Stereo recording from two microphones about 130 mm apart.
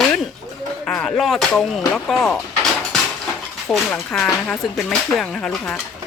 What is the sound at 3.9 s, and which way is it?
Speech, 10° left (ahead or behind).